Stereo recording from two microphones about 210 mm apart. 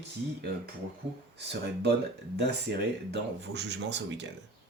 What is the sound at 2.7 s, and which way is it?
Speech, 55° right (ahead or behind).